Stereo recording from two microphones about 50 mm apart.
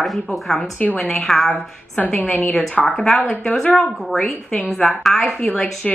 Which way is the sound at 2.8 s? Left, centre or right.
Centre.